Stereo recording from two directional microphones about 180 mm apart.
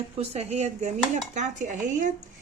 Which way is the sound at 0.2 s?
35° right (ahead or behind).